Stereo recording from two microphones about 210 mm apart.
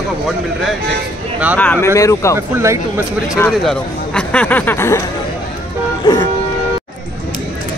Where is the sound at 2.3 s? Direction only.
15° right (ahead or behind).